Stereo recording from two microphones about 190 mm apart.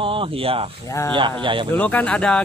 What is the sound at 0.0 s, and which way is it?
Speech, 25° right (ahead or behind).